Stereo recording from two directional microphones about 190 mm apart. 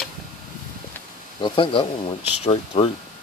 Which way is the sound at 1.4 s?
25° left (ahead or behind).